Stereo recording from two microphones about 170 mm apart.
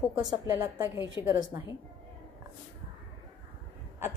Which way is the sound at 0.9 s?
25° left (ahead or behind).